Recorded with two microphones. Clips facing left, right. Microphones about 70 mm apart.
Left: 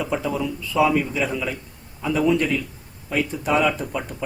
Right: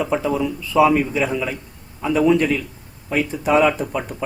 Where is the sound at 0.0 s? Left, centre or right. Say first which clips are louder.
Right 4 dB; centre.